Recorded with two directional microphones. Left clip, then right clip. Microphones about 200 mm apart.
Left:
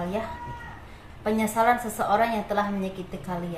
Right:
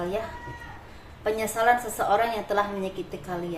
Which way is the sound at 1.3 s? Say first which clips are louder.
Even; 30° right (ahead or behind).